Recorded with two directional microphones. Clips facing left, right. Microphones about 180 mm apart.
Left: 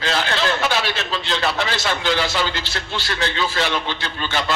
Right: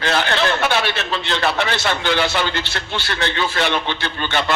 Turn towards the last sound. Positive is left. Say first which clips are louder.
# right 2 dB
turn(degrees=-60)  # may be behind; listen again after turning